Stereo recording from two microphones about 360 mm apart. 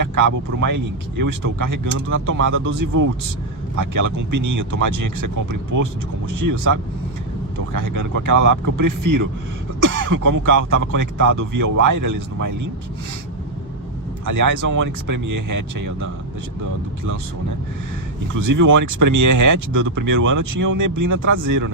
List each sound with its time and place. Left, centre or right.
0.0 s speech: right
14.3 s speech: right
18.4 s speech: right